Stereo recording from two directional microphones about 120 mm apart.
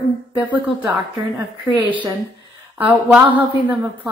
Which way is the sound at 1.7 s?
15° right (ahead or behind).